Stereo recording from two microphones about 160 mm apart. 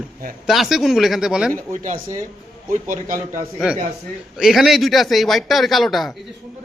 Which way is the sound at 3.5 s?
5° right (ahead or behind).